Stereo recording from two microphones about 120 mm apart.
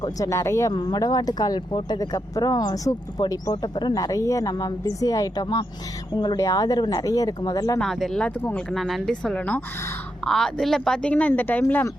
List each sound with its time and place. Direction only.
0.0 s speech: 25° left (ahead or behind)
7.8 s speech: centre (ahead or behind)